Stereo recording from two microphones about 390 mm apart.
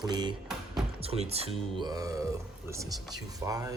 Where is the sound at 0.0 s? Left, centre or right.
Centre.